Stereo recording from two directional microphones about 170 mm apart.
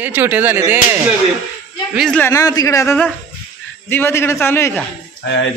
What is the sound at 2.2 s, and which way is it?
A man's voice, 20° left (ahead or behind).